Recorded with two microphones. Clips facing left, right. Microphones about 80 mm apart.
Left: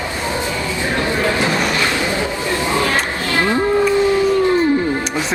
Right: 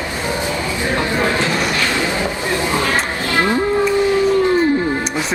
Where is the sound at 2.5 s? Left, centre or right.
Right.